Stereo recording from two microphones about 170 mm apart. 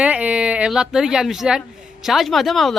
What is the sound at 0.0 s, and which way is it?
Speech, 5° right (ahead or behind).